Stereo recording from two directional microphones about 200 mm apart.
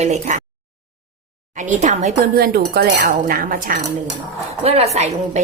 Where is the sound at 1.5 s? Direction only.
40° right (ahead or behind).